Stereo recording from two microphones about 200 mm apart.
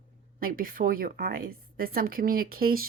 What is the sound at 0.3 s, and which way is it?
Speech, 45° right (ahead or behind).